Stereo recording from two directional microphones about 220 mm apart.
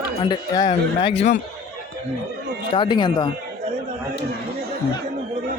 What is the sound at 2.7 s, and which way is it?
Speech, 20° left (ahead or behind).